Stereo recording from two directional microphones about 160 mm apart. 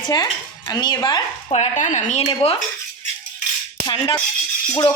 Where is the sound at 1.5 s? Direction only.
45° left (ahead or behind).